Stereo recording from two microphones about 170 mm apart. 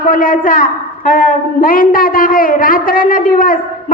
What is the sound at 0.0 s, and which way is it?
A woman's voice, 55° left (ahead or behind).